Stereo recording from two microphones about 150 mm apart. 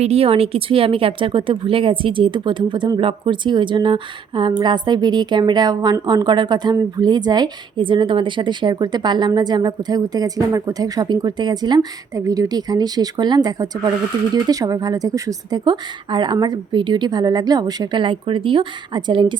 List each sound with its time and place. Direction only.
0.0 s speech: 40° right (ahead or behind)